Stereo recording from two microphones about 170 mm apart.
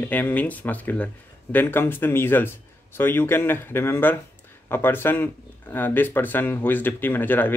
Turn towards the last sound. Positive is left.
turn(degrees=10)  # may be behind; listen again after turning